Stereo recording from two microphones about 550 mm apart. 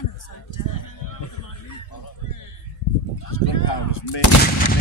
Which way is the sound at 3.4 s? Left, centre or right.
Left.